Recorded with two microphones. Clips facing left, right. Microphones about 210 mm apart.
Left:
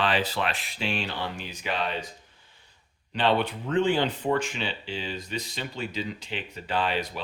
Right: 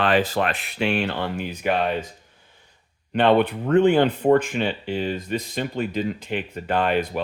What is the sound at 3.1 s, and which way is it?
Speech, 55° right (ahead or behind).